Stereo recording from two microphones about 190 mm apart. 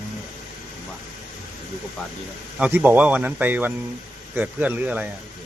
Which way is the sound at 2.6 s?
10° right (ahead or behind).